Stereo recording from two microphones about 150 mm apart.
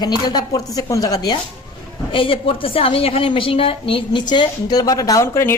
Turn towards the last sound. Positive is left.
turn(degrees=15)  # may be behind; listen again after turning